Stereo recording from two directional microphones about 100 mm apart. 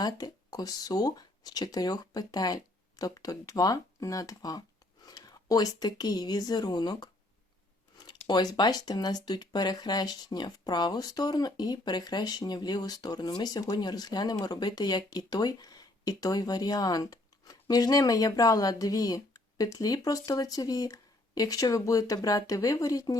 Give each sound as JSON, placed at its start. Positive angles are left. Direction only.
{"t": 0.0, "sound": "a woman's voice", "side_deg": 40}